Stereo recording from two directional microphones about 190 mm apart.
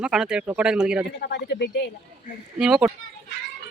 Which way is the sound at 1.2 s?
60° left (ahead or behind).